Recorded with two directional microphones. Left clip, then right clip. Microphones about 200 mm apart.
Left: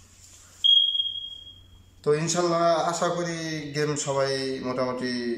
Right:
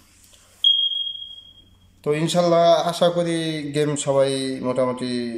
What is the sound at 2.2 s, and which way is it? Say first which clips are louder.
A man's voice: right 11 dB; 30° right (ahead or behind).